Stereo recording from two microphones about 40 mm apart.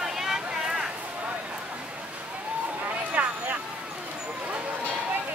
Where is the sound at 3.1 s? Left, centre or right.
Right.